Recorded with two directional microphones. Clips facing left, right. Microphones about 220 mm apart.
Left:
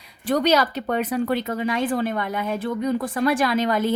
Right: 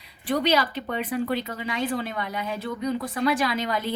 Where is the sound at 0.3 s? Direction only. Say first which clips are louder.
Left 4 dB; 45° left (ahead or behind).